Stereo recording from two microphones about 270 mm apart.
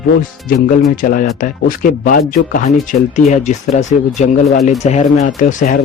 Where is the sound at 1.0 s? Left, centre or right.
Left.